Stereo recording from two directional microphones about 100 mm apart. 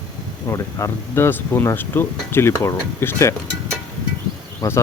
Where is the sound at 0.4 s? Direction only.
30° left (ahead or behind).